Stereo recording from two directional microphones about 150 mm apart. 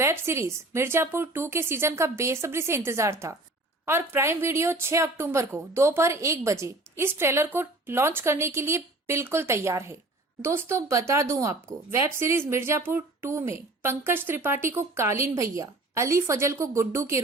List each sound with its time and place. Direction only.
0.0 s a woman's voice: 15° right (ahead or behind)